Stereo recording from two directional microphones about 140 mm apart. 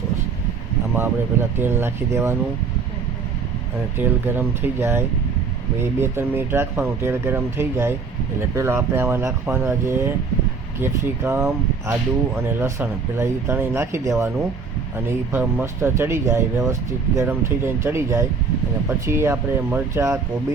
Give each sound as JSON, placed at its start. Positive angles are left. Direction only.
{"t": 0.9, "sound": "speech", "side_deg": -15}
{"t": 3.9, "sound": "speech", "side_deg": -15}